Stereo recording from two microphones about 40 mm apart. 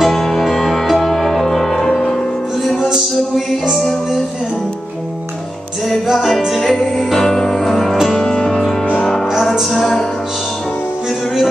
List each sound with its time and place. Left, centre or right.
0.0 s music: centre
6.2 s music: centre
8.1 s music: centre
9.6 s music: centre